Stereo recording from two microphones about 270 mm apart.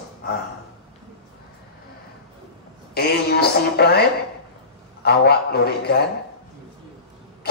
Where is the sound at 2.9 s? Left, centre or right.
Left.